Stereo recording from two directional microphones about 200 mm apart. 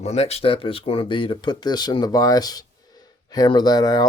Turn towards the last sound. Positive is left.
turn(degrees=20)  # may be behind; listen again after turning